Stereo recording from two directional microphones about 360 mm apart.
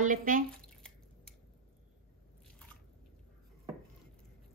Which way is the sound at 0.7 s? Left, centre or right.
Centre.